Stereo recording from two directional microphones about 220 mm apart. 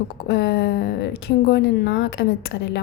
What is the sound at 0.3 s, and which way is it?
A woman's voice, 50° left (ahead or behind).